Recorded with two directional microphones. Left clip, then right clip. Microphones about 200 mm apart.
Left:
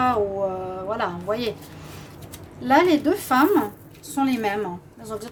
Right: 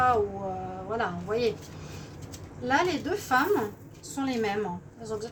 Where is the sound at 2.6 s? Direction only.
50° left (ahead or behind).